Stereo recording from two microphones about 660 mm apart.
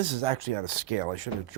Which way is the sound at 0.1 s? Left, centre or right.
Right.